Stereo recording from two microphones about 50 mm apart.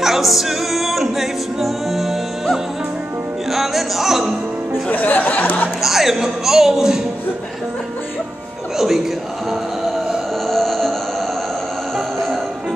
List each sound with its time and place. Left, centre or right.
0.0 s music: centre
5.0 s speech: left
5.8 s a man's voice: centre
8.7 s a sound: centre
10.4 s music: centre